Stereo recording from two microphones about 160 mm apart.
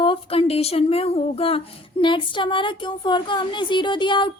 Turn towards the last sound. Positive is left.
turn(degrees=30)  # may be behind; listen again after turning